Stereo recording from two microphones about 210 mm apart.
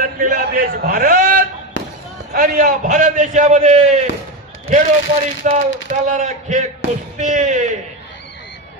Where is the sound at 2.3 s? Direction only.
45° right (ahead or behind).